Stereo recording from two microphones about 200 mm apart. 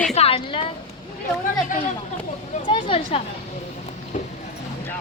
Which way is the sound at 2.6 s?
25° left (ahead or behind).